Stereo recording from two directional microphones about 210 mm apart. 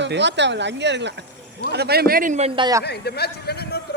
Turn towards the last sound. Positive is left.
turn(degrees=50)  # may be behind; listen again after turning